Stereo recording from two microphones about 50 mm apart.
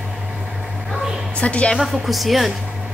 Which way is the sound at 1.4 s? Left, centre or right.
Left.